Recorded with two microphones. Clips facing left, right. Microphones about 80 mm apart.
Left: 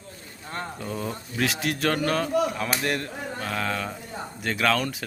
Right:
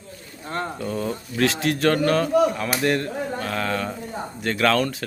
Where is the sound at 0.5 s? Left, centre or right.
Centre.